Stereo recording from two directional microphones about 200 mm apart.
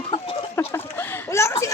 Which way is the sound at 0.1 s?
25° left (ahead or behind).